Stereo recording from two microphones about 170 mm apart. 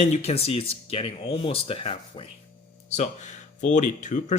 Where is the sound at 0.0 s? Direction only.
40° left (ahead or behind).